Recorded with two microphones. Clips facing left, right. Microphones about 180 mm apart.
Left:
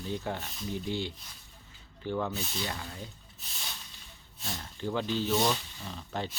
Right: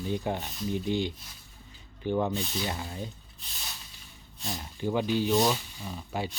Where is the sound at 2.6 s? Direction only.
20° right (ahead or behind).